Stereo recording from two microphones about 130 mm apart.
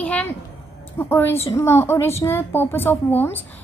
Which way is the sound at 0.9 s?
15° left (ahead or behind).